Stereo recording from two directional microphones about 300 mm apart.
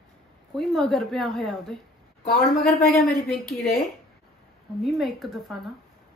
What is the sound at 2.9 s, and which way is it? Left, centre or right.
Speech, centre.